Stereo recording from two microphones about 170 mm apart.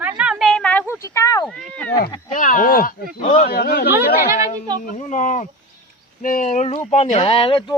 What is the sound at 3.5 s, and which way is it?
Speech, 65° left (ahead or behind).